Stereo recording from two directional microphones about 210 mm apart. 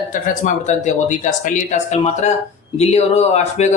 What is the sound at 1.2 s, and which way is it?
A man's voice, 35° left (ahead or behind).